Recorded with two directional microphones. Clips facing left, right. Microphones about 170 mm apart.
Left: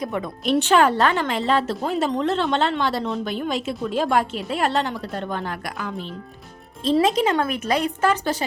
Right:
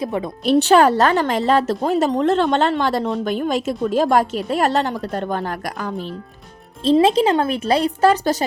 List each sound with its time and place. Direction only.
0.0 s a woman's voice: 30° right (ahead or behind)
6.8 s speech: 30° right (ahead or behind)